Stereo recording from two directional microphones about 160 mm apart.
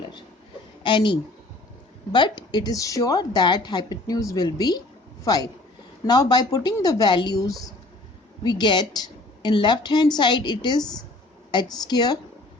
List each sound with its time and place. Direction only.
0.8 s a woman's voice: 30° left (ahead or behind)